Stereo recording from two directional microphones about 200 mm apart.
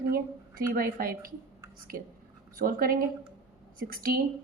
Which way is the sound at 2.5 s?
45° right (ahead or behind).